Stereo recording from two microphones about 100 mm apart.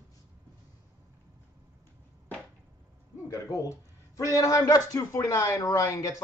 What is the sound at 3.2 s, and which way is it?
Speech, 35° left (ahead or behind).